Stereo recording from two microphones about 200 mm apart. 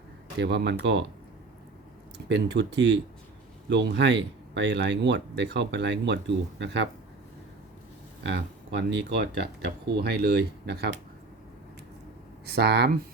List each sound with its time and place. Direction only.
0.3 s speech: 60° right (ahead or behind)
2.1 s speech: 60° right (ahead or behind)
8.2 s speech: 60° right (ahead or behind)
12.5 s speech: 55° right (ahead or behind)